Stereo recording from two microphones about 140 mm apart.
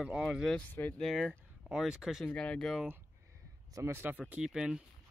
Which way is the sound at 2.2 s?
10° left (ahead or behind).